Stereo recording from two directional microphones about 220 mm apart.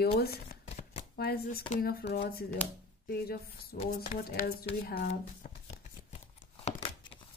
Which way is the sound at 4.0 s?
40° left (ahead or behind).